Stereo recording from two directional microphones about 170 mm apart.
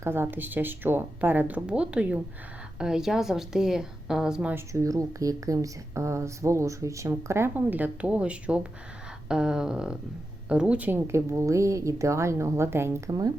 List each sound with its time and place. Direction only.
0.0 s speech: 15° right (ahead or behind)
4.7 s speech: 20° right (ahead or behind)